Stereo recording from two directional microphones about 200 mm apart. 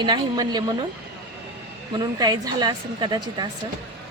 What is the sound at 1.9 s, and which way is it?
A woman's voice, 20° right (ahead or behind).